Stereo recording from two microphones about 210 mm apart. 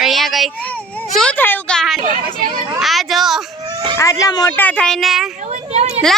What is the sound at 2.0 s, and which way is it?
Speech, 40° right (ahead or behind).